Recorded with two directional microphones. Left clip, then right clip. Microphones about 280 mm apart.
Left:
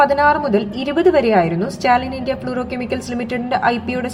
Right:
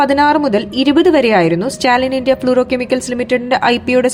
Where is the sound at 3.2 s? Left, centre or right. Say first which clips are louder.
Right 4 dB; right.